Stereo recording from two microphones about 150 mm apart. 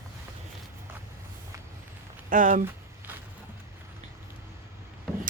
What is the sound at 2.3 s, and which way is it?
Speech, 65° right (ahead or behind).